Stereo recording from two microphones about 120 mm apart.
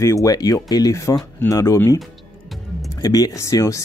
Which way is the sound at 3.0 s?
30° left (ahead or behind).